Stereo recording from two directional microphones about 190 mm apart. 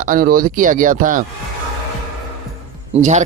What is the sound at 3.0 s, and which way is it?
Speech, 40° right (ahead or behind).